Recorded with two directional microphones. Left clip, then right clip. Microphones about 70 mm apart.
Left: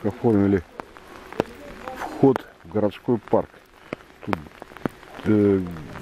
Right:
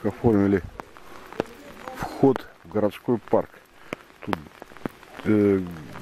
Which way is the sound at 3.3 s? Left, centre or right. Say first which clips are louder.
Left 1 dB; right.